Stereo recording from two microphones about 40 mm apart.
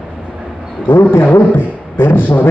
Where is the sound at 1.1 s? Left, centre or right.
Left.